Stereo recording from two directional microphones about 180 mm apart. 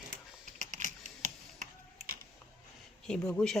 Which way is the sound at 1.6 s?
55° right (ahead or behind).